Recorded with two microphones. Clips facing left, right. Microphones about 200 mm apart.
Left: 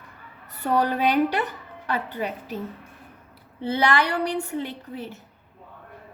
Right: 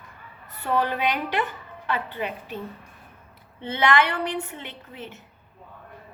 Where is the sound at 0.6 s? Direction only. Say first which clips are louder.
Left 3 dB; 40° left (ahead or behind).